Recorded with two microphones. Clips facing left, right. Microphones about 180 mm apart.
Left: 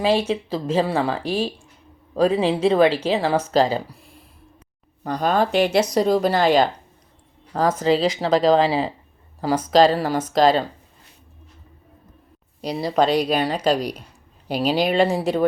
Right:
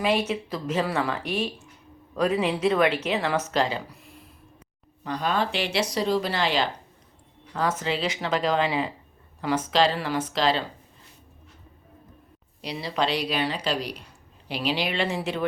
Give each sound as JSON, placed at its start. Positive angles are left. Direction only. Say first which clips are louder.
{"t": 0.0, "sound": "a woman's voice", "louder": "left 5 dB", "side_deg": 30}
{"t": 12.6, "sound": "a woman's voice", "louder": "left 8 dB", "side_deg": 40}